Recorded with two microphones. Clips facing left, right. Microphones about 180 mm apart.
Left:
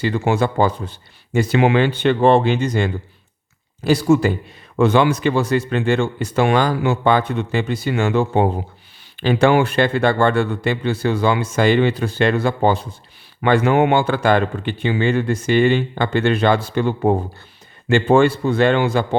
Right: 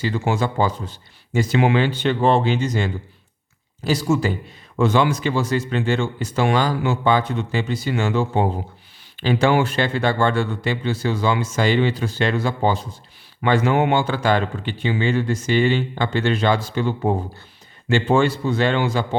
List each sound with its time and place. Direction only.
0.0 s speech: 60° left (ahead or behind)